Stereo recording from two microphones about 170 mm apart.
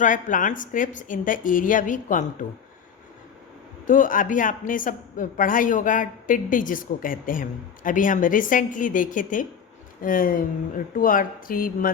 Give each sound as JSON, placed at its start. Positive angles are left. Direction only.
{"t": 0.0, "sound": "a woman's voice", "side_deg": 50}
{"t": 3.8, "sound": "a woman's voice", "side_deg": 50}